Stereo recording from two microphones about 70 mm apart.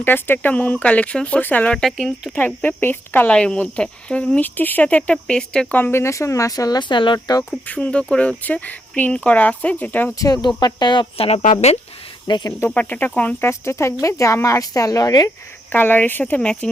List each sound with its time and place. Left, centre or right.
0.0 s speech: left
1.8 s speech: centre
2.4 s speech: left
3.3 s speech: centre
5.1 s speech: centre
5.7 s speech: left
6.7 s speech: left
7.7 s speech: centre
10.2 s speech: left
10.8 s speech: left
12.3 s speech: left
12.6 s speech: left
13.5 s speech: left
15.7 s speech: left